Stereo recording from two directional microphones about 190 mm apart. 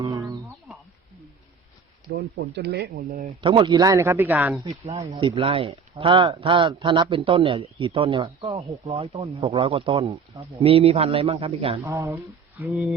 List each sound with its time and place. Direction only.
0.0 s wild animals: 15° right (ahead or behind)
2.4 s speech: 65° right (ahead or behind); by 3.3 s 45° right (ahead or behind)
3.4 s speech: 25° right (ahead or behind); by 4.6 s 10° right (ahead or behind)
4.9 s speech: 20° right (ahead or behind)
11.8 s speech: 15° right (ahead or behind)